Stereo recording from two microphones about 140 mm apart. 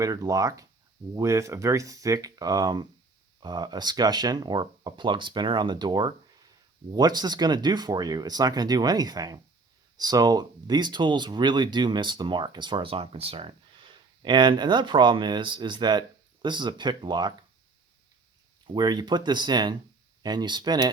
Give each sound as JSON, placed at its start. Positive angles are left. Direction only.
{"t": 0.0, "sound": "speech", "side_deg": -25}
{"t": 18.7, "sound": "speech", "side_deg": -30}